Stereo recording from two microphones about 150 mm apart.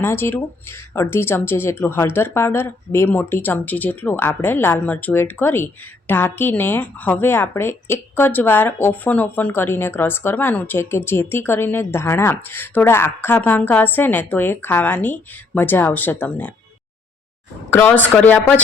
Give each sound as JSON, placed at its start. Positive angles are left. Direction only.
{"t": 0.0, "sound": "a woman's voice", "side_deg": 15}
{"t": 17.7, "sound": "a woman's voice", "side_deg": 15}